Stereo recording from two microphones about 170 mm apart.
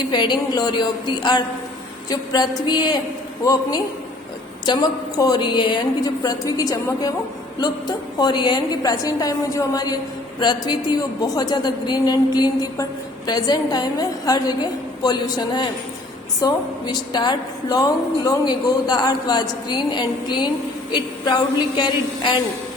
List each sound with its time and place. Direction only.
0.0 s a woman's voice: 25° left (ahead or behind)
21.8 s a woman's voice: 25° left (ahead or behind)